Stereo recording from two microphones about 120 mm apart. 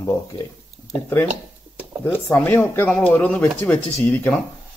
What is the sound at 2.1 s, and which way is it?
A man's voice, 15° left (ahead or behind).